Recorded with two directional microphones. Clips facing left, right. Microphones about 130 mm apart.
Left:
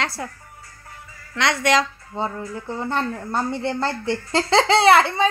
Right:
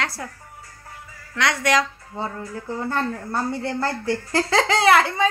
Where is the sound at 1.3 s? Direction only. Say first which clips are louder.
Left 1 dB; 25° left (ahead or behind).